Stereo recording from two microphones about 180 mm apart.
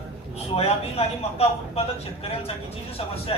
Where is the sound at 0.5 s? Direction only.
35° left (ahead or behind).